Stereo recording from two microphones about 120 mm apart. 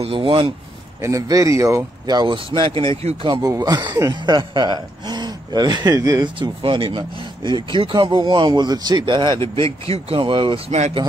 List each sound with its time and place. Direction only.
0.0 s speech: 45° right (ahead or behind)
1.0 s speech: 25° right (ahead or behind); by 2.9 s 45° right (ahead or behind)
3.0 s speech: 60° right (ahead or behind)
3.4 s speech: 35° right (ahead or behind)
9.4 s speech: 55° right (ahead or behind)